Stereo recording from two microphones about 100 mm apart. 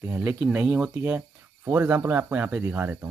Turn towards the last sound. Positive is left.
turn(degrees=-20)  # may be behind; listen again after turning